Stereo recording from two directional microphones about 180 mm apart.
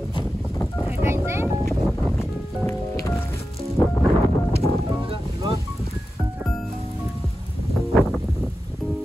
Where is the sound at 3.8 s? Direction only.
25° left (ahead or behind).